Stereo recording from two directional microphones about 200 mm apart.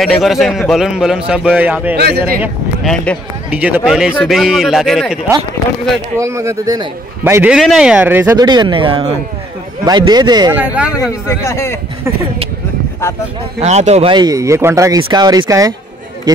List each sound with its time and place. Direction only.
0.0 s a man's voice: centre (ahead or behind)
2.0 s speech: 55° right (ahead or behind)
2.4 s a man's voice: centre (ahead or behind)
6.1 s speech: 15° right (ahead or behind)
7.5 s speech: centre (ahead or behind); by 10.5 s 20° right (ahead or behind)
10.6 s speech: 5° right (ahead or behind)
11.0 s a man's voice: 15° left (ahead or behind)
13.0 s a man's voice: 10° left (ahead or behind)
13.6 s speech: 35° right (ahead or behind); by 15.7 s 15° right (ahead or behind)